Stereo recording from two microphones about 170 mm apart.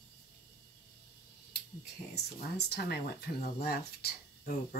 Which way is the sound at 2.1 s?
75° left (ahead or behind).